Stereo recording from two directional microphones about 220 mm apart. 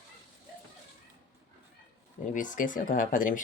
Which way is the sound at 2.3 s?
35° left (ahead or behind).